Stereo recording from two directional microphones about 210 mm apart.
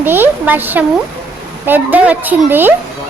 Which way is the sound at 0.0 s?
10° right (ahead or behind).